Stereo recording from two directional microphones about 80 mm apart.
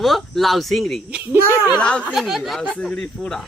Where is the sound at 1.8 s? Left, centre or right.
Centre.